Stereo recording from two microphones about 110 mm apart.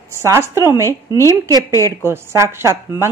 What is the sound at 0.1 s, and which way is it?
A woman's voice, 25° right (ahead or behind).